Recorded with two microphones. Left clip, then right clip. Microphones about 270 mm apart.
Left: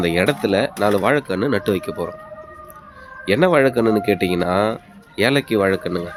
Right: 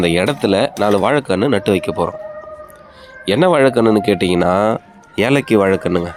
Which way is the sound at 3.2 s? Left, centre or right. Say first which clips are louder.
Right 3 dB; centre.